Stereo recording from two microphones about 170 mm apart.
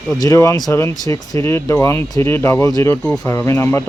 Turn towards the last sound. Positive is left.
turn(degrees=15)  # may be behind; listen again after turning